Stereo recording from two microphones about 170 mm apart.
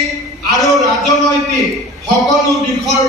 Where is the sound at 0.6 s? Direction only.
Centre (ahead or behind).